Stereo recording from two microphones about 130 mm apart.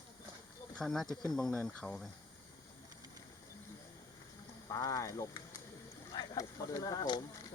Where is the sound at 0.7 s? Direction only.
5° left (ahead or behind).